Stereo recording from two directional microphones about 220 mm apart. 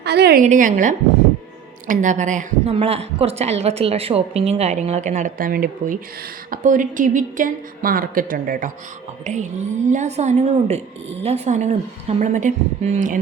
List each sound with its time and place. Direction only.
0.0 s a woman's voice: 50° right (ahead or behind)
0.4 s a woman's voice: 35° right (ahead or behind)